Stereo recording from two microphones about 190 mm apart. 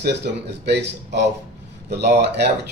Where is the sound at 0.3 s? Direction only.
60° right (ahead or behind).